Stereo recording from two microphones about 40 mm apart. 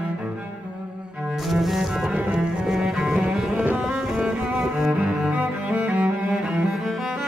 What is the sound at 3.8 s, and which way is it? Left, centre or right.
Cello, centre.